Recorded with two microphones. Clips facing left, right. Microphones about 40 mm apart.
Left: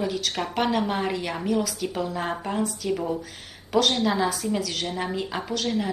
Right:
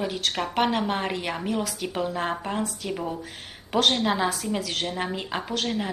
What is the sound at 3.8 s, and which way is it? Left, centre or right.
Speech, right.